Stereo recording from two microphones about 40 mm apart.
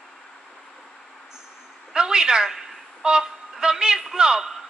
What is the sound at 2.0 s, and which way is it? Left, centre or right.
A woman's voice, centre.